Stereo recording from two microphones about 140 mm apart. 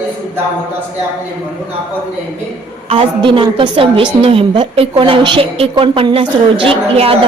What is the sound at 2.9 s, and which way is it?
A woman's voice, 40° right (ahead or behind).